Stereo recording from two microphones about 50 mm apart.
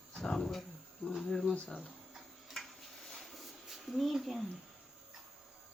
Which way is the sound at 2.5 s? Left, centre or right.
Centre.